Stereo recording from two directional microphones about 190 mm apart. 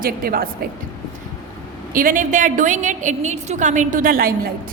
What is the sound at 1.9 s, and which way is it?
A woman's voice, 45° right (ahead or behind).